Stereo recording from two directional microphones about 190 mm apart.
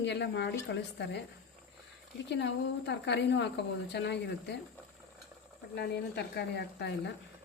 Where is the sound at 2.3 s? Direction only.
65° left (ahead or behind).